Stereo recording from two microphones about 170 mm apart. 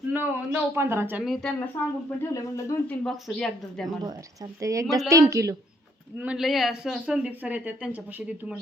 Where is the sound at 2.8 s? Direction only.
Centre (ahead or behind).